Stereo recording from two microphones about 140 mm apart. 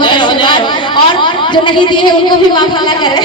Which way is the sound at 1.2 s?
35° left (ahead or behind).